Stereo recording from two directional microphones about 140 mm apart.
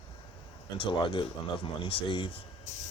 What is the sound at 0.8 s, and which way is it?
Speech, 40° left (ahead or behind).